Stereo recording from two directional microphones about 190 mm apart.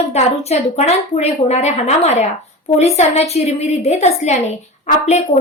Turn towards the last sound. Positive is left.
turn(degrees=35)  # may be behind; listen again after turning